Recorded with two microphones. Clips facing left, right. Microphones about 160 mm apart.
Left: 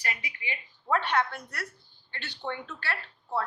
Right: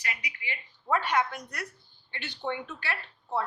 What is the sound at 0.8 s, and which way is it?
A woman's voice, 5° right (ahead or behind).